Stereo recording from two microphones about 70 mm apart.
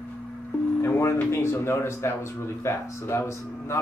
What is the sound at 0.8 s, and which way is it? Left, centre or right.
A man's voice, left.